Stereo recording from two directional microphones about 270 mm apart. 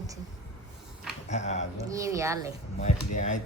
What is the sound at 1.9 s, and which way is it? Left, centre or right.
Speech, centre.